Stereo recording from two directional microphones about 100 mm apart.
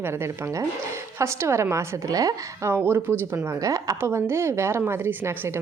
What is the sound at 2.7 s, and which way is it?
Speech, 20° right (ahead or behind).